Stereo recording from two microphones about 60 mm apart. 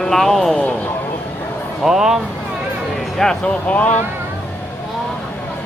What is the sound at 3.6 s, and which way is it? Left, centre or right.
Speech, left.